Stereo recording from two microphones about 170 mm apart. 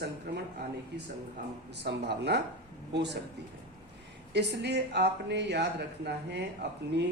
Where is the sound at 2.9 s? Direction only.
90° right.